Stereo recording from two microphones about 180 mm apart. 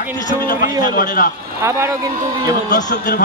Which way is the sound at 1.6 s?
15° right (ahead or behind).